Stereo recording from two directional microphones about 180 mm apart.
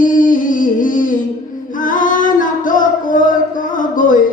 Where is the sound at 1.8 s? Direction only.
50° left (ahead or behind).